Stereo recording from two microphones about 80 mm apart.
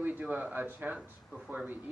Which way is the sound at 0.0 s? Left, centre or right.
Right.